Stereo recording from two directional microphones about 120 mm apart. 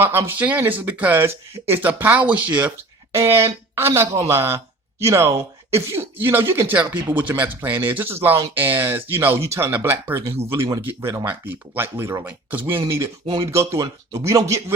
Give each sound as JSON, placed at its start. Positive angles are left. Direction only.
{"t": 0.0, "sound": "speech", "side_deg": -20}
{"t": 10.2, "sound": "speech", "side_deg": -60}
{"t": 10.5, "sound": "speech", "side_deg": -25}
{"t": 13.2, "sound": "speech", "side_deg": -35}
{"t": 13.5, "sound": "speech", "side_deg": -25}